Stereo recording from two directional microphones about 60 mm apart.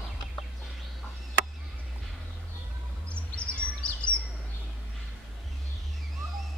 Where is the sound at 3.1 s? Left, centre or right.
Centre.